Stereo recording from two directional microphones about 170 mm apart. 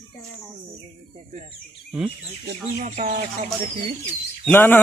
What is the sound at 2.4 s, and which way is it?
Speech, 45° right (ahead or behind).